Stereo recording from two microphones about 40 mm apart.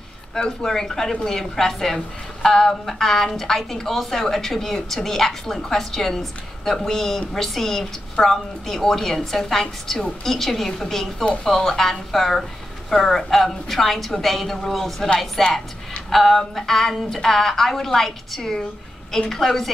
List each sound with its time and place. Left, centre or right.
0.3 s a woman's voice: centre